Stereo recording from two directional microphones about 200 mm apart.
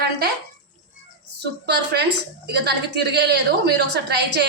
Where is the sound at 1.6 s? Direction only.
55° right (ahead or behind).